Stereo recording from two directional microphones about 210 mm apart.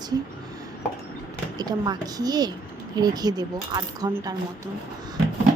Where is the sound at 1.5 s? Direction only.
20° right (ahead or behind).